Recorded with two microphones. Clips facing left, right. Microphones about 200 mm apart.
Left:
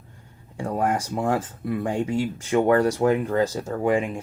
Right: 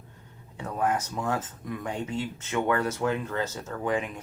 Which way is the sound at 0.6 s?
35° left (ahead or behind).